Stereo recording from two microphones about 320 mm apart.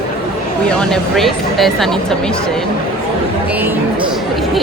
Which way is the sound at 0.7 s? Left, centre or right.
Centre.